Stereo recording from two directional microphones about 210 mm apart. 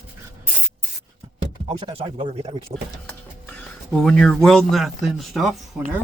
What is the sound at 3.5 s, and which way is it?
Speech, 5° left (ahead or behind).